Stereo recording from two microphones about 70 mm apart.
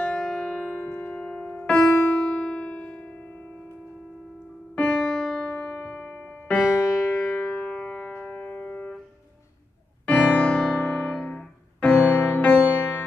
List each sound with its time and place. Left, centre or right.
0.0 s music: centre
4.7 s music: centre
5.5 s music: left
6.9 s music: centre
10.0 s keyboard: left
10.6 s music: centre